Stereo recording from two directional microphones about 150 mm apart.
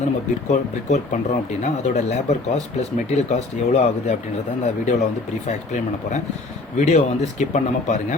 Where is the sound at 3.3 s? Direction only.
45° left (ahead or behind).